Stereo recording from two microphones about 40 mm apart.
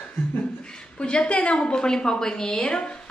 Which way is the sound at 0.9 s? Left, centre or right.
Left.